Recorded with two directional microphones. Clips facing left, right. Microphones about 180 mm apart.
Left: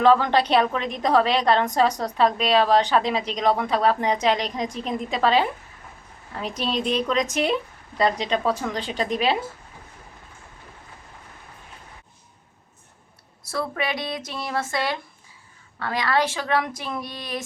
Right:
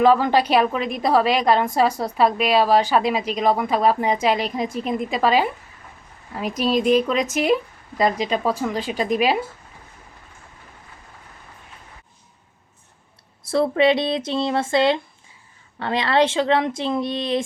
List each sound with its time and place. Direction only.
0.0 s a woman's voice: 10° right (ahead or behind)
6.6 s a woman's voice: 10° right (ahead or behind)
13.5 s speech: 25° right (ahead or behind)